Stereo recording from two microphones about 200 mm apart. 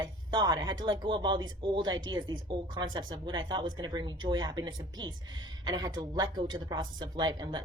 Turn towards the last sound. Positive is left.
turn(degrees=-20)  # may be behind; listen again after turning